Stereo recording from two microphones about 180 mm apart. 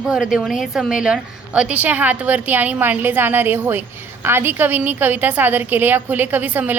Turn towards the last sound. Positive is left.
turn(degrees=-10)  # may be behind; listen again after turning